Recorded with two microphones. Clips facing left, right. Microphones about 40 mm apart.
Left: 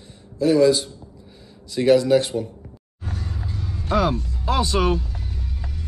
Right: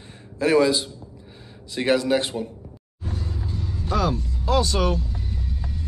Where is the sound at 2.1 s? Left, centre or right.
Centre.